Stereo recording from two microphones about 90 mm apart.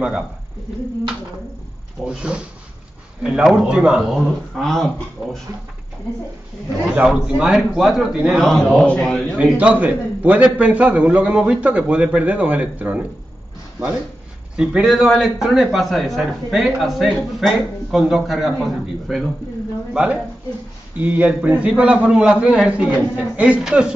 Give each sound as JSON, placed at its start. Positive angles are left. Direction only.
{"t": 2.0, "sound": "a man's voice", "side_deg": -10}
{"t": 7.1, "sound": "a man's voice", "side_deg": -10}
{"t": 9.4, "sound": "a man's voice", "side_deg": -15}
{"t": 14.6, "sound": "a man's voice", "side_deg": -5}